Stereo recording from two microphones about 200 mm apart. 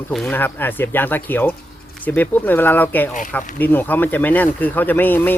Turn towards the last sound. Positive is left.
turn(degrees=10)  # may be behind; listen again after turning